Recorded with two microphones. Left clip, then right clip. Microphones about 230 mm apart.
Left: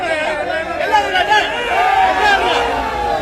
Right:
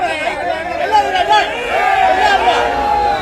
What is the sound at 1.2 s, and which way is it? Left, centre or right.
Chatter, left.